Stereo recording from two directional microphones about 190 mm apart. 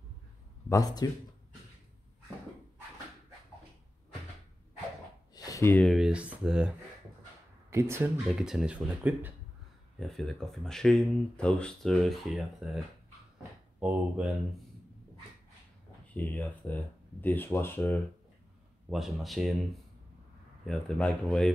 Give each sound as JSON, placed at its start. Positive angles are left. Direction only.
{"t": 0.7, "sound": "a man's voice", "side_deg": 20}
{"t": 5.3, "sound": "a sound", "side_deg": 20}
{"t": 5.9, "sound": "speech", "side_deg": 0}
{"t": 7.7, "sound": "speech", "side_deg": -15}
{"t": 9.9, "sound": "speech", "side_deg": 0}
{"t": 16.1, "sound": "speech", "side_deg": 10}
{"t": 18.9, "sound": "speech", "side_deg": 0}